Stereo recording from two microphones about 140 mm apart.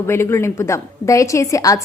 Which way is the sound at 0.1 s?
20° left (ahead or behind).